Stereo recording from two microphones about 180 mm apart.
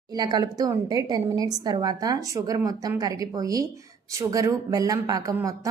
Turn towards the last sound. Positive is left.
turn(degrees=-15)  # may be behind; listen again after turning